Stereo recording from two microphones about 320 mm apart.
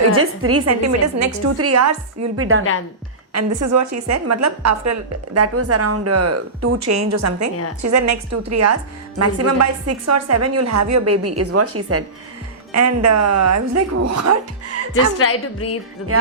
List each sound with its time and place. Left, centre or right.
0.1 s a woman's voice: right
3.3 s a woman's voice: right
15.2 s a woman's voice: left